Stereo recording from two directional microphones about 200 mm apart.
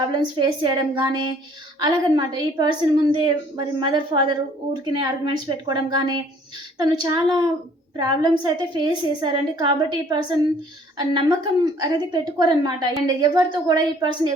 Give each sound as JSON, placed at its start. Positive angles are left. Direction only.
{"t": 0.3, "sound": "a woman's voice", "side_deg": -25}